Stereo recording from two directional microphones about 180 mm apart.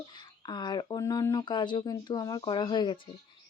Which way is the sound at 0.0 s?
25° left (ahead or behind).